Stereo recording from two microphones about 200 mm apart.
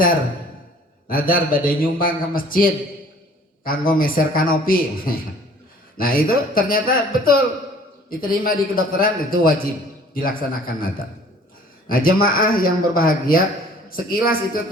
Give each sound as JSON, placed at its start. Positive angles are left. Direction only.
{"t": 1.0, "sound": "a man's voice", "side_deg": 45}
{"t": 11.9, "sound": "a man's voice", "side_deg": 45}